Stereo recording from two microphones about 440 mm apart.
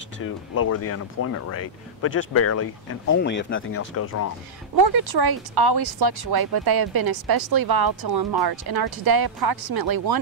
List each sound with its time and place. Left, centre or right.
0.2 s speech: left
4.7 s speech: right